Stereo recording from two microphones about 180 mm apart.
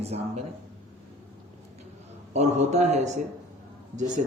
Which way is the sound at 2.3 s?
40° right (ahead or behind).